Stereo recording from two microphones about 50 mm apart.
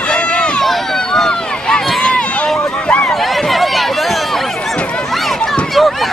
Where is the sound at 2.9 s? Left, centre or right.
Left.